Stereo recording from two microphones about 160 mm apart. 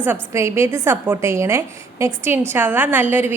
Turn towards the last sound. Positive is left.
turn(degrees=-10)  # may be behind; listen again after turning